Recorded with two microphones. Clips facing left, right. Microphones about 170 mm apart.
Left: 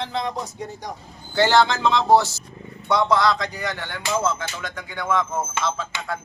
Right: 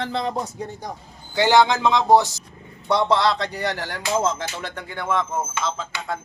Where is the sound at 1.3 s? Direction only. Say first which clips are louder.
Right 1 dB; 15° right (ahead or behind).